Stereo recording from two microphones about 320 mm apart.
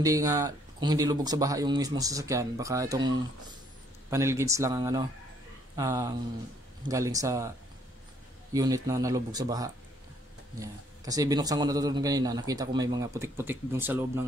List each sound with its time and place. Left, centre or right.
0.0 s speech: centre
4.1 s speech: centre
8.5 s speech: centre